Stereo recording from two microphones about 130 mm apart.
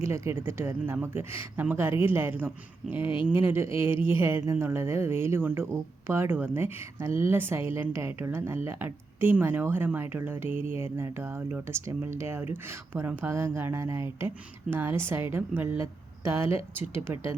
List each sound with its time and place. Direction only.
0.0 s a woman's voice: 20° right (ahead or behind)
3.0 s speech: 40° left (ahead or behind)
3.3 s a woman's voice: 20° right (ahead or behind)